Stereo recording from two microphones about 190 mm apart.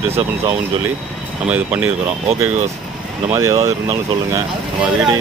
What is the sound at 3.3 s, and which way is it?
Speech, 15° right (ahead or behind).